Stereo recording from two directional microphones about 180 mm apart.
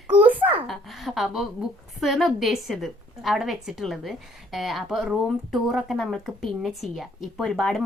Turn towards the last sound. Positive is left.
turn(degrees=0)  # may be behind; listen again after turning